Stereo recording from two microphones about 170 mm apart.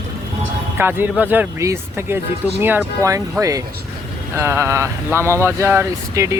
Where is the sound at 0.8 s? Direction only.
10° right (ahead or behind).